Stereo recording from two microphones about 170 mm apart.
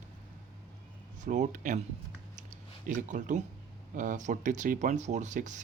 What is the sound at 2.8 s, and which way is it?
A man's voice, 45° right (ahead or behind).